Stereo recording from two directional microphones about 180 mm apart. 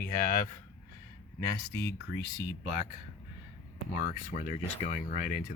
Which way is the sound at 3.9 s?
50° left (ahead or behind).